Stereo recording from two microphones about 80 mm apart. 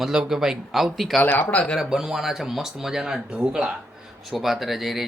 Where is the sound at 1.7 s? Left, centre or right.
Centre.